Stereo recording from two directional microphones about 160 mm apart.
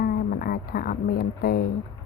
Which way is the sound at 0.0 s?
65° left (ahead or behind).